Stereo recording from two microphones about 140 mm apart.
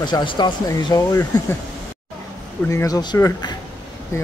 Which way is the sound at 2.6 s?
25° left (ahead or behind).